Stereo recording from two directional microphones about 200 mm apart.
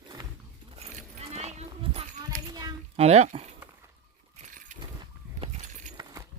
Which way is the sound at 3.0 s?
30° right (ahead or behind).